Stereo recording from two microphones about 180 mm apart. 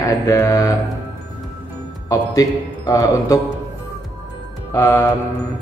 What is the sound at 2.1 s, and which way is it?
Speech, 20° left (ahead or behind).